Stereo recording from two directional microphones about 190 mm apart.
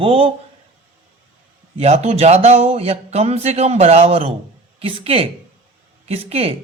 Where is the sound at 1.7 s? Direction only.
35° right (ahead or behind).